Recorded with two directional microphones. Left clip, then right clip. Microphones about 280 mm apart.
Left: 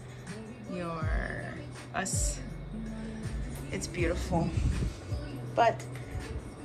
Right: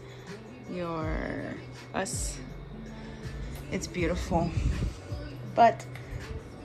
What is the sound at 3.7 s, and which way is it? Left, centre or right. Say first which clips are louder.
Speech: right 2 dB; centre.